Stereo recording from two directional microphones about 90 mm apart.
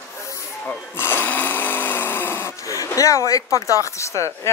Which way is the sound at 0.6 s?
25° left (ahead or behind).